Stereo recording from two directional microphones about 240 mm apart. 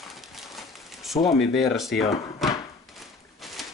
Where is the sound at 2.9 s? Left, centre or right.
Centre.